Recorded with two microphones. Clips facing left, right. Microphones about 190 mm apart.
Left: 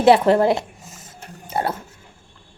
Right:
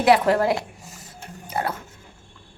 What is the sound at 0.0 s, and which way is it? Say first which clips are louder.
A woman's voice: left 4 dB; 25° left (ahead or behind).